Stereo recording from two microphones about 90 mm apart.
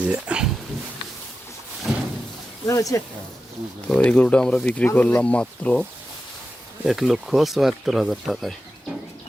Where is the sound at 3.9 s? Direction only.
10° left (ahead or behind).